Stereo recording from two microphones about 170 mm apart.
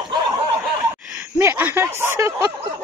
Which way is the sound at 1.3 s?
15° right (ahead or behind).